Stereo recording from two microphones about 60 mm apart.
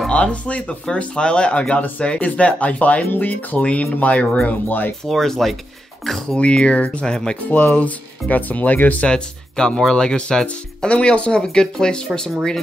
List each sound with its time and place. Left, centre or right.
0.1 s speech: centre
4.5 s speech: left
5.0 s speech: centre
6.3 s speech: centre
7.5 s speech: left
9.0 s speech: centre